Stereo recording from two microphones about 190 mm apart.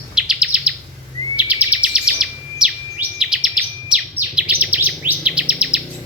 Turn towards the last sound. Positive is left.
turn(degrees=-5)  # may be behind; listen again after turning